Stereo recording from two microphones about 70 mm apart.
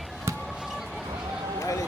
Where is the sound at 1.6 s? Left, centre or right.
Left.